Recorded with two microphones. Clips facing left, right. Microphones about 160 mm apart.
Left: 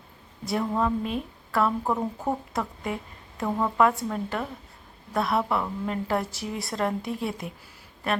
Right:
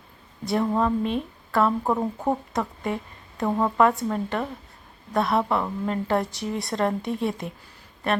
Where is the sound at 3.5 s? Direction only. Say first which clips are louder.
Right 3 dB; 20° right (ahead or behind).